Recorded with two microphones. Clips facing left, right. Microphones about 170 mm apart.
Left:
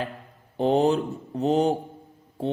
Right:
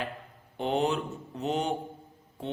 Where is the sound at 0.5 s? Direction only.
35° left (ahead or behind).